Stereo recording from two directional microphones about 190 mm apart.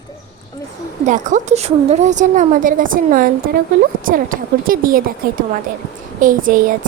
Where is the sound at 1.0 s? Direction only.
40° right (ahead or behind).